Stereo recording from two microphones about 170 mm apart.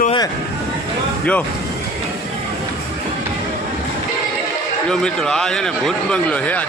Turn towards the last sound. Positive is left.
turn(degrees=5)  # may be behind; listen again after turning